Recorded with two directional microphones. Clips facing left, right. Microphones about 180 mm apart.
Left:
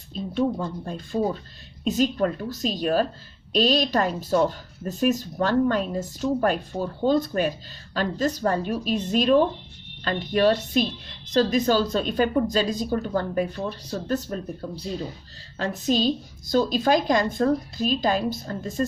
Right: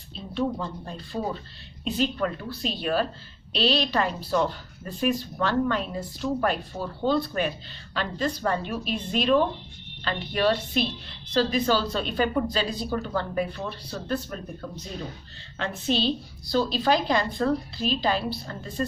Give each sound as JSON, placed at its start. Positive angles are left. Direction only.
{"t": 0.1, "sound": "a woman's voice", "side_deg": 45}